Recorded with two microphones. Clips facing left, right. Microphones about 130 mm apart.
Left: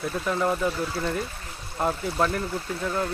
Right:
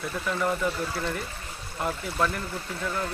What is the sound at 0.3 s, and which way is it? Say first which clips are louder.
Speech: left 2 dB; 25° left (ahead or behind).